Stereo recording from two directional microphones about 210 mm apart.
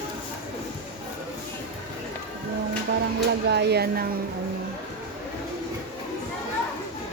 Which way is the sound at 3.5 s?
50° right (ahead or behind).